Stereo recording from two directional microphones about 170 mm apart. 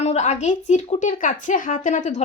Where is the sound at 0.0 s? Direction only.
40° left (ahead or behind).